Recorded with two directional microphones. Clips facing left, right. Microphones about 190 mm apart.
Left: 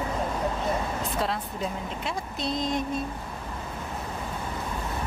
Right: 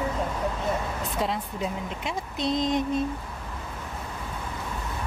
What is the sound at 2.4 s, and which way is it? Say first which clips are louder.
Mantra: right 4 dB; 20° right (ahead or behind).